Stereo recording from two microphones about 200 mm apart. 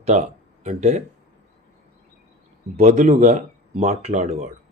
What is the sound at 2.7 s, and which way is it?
Speech, 35° right (ahead or behind).